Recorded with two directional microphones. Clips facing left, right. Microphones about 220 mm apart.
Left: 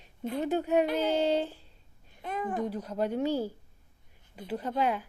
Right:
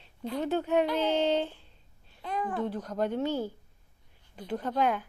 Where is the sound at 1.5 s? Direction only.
40° left (ahead or behind).